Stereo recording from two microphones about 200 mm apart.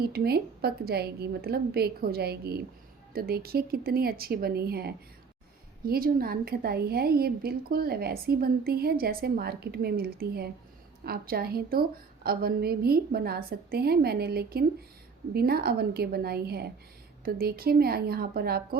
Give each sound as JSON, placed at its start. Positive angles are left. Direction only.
{"t": 0.0, "sound": "a woman's voice", "side_deg": -50}